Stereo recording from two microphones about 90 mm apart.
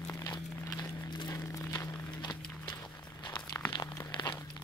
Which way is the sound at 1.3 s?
45° left (ahead or behind).